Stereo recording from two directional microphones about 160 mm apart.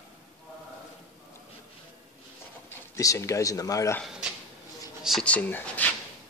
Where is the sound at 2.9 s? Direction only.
20° left (ahead or behind).